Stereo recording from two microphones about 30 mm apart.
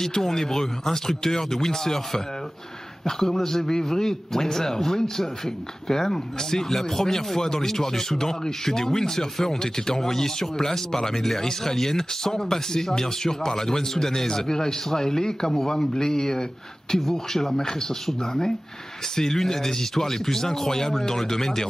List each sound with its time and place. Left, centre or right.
0.0 s speech: centre